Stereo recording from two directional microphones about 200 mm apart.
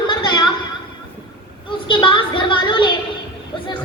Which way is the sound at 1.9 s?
25° left (ahead or behind).